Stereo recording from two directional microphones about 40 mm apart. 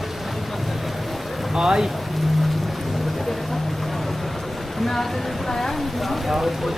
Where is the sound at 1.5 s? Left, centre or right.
Centre.